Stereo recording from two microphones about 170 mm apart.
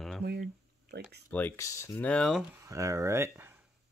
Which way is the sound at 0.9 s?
75° right (ahead or behind).